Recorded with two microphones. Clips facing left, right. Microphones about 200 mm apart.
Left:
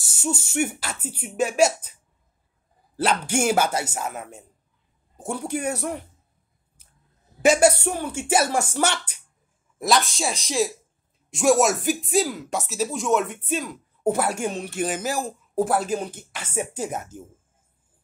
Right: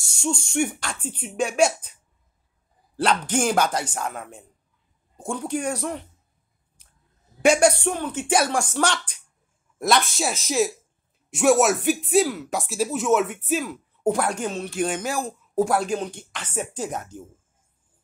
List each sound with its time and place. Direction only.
0.0 s a sound: 5° left (ahead or behind)
1.0 s speech: 5° left (ahead or behind)
3.0 s speech: 10° left (ahead or behind)
7.4 s a man's voice: 5° left (ahead or behind)